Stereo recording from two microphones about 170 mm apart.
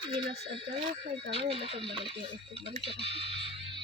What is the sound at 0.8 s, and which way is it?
Speech, 30° right (ahead or behind).